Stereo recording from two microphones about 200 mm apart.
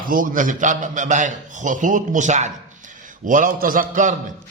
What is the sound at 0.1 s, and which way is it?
A man's voice, 45° right (ahead or behind).